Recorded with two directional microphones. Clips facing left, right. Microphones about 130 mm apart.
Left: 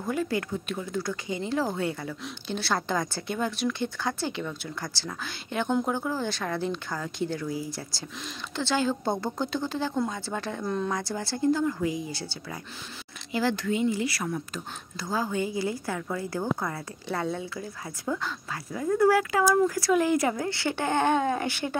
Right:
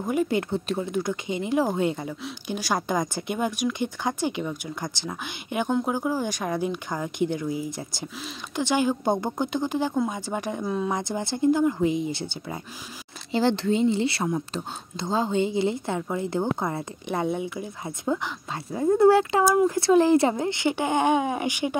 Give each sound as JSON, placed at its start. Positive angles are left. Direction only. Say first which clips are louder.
{"t": 0.0, "sound": "a woman's voice", "louder": "right 4 dB", "side_deg": -20}